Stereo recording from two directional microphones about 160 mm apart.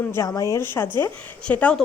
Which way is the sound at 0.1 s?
20° left (ahead or behind).